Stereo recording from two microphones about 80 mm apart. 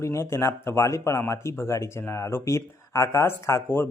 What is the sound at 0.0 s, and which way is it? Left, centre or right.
A man's voice, left.